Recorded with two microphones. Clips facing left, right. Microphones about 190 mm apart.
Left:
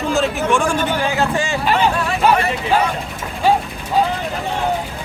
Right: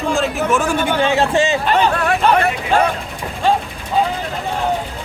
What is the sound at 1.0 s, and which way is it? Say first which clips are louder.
Speech: right 4 dB; 25° right (ahead or behind).